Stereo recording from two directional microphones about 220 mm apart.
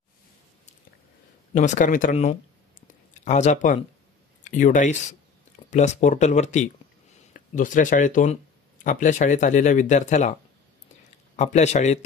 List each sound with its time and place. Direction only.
1.5 s speech: 35° left (ahead or behind)
11.3 s speech: 30° left (ahead or behind)